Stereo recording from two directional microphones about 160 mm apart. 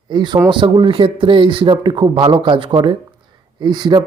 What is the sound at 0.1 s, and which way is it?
Speech, 30° right (ahead or behind).